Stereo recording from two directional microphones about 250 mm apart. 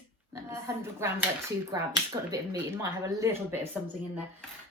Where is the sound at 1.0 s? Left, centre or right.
Centre.